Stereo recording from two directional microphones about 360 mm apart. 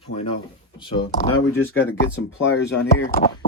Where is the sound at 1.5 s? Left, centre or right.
Left.